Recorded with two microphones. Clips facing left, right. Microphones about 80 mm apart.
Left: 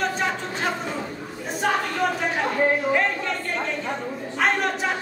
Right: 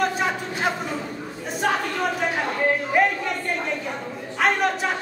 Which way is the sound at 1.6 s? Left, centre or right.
Centre.